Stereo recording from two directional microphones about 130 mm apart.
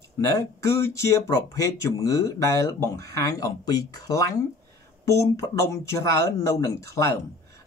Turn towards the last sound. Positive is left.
turn(degrees=25)  # may be behind; listen again after turning